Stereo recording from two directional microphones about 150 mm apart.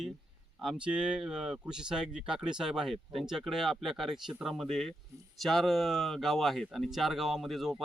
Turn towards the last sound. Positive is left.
turn(degrees=0)  # may be behind; listen again after turning